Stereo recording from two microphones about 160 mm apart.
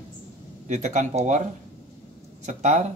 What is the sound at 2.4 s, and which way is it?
Speech, 50° right (ahead or behind).